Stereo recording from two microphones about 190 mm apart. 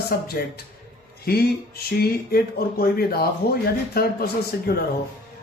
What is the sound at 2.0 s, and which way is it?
Speech, 55° left (ahead or behind).